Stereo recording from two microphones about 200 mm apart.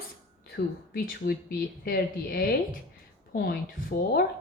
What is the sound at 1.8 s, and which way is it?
A woman's voice, 45° left (ahead or behind).